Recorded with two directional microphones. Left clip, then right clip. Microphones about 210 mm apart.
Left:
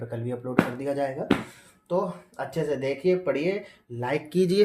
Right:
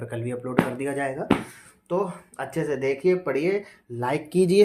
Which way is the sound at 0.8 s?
25° right (ahead or behind).